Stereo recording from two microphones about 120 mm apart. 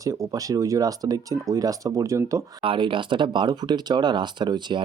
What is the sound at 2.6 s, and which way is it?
Speech, 45° right (ahead or behind).